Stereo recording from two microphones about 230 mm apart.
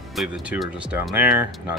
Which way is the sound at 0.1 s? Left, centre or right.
Centre.